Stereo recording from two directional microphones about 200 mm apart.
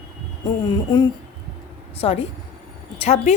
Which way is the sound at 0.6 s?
20° left (ahead or behind).